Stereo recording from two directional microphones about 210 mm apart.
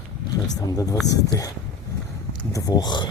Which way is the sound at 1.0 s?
15° left (ahead or behind).